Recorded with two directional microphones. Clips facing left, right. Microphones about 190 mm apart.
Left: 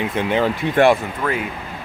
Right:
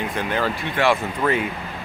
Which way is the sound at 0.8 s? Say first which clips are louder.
Left 6 dB; 50° left (ahead or behind).